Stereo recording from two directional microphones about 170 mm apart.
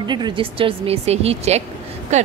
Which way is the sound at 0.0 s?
25° right (ahead or behind).